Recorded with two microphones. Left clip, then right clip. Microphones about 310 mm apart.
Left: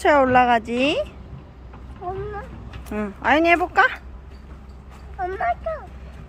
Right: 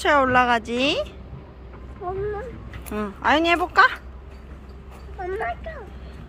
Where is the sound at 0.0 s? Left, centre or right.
Centre.